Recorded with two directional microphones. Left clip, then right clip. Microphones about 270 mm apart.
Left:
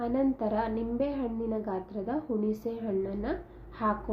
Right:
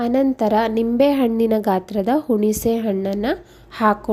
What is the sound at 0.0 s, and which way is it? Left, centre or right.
A woman's voice, right.